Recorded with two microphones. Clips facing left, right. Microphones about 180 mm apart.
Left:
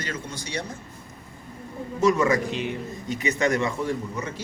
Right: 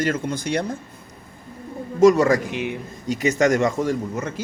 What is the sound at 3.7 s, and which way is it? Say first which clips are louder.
Speech: right 5 dB; 90° right.